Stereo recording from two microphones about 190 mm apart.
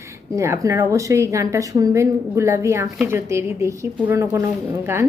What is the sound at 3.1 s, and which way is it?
A woman's voice, 15° right (ahead or behind).